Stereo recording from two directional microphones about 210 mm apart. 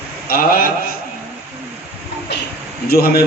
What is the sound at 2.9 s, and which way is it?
Speech, 45° left (ahead or behind).